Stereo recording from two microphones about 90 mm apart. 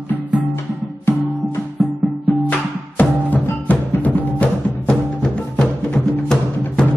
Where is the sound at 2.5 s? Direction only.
20° left (ahead or behind).